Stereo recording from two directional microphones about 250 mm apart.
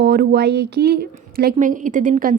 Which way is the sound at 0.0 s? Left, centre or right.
Right.